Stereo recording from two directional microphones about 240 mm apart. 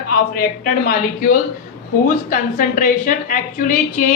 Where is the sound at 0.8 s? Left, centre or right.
Left.